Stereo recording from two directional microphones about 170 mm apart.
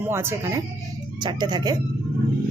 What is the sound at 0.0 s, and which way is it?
Speech, 15° right (ahead or behind).